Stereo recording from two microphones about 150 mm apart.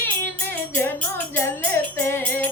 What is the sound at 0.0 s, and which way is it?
Music, 15° left (ahead or behind).